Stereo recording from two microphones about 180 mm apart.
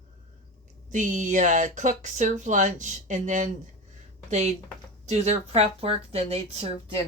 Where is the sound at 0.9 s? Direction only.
45° right (ahead or behind).